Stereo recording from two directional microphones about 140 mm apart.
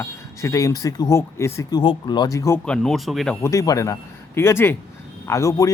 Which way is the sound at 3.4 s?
20° left (ahead or behind).